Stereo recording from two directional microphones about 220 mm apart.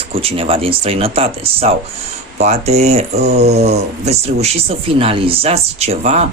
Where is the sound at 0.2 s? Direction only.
25° right (ahead or behind).